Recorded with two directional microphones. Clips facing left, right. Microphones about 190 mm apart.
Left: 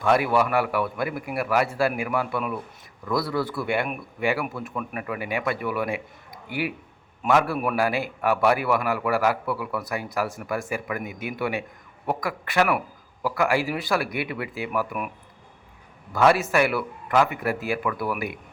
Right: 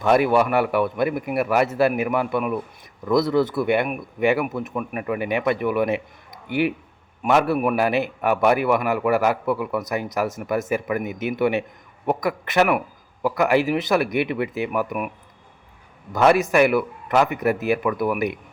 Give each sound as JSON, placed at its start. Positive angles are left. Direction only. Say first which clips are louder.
{"t": 0.0, "sound": "a man's voice", "louder": "right 4 dB", "side_deg": -25}
{"t": 16.1, "sound": "a man's voice", "louder": "right 3 dB", "side_deg": -20}